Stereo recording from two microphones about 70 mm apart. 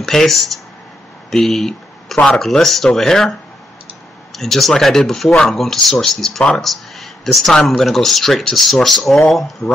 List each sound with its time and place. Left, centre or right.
0.0 s speech: centre
4.4 s speech: centre
9.6 s a man's voice: left